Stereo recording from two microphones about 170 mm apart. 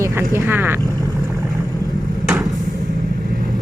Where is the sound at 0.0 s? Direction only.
15° right (ahead or behind).